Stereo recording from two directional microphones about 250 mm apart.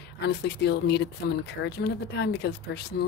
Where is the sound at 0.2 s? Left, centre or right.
Left.